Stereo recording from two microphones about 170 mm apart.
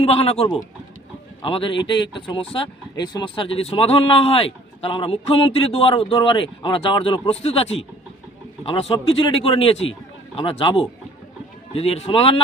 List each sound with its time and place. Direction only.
0.0 s speech: 35° left (ahead or behind)